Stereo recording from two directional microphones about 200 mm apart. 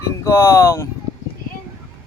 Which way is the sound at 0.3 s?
15° left (ahead or behind).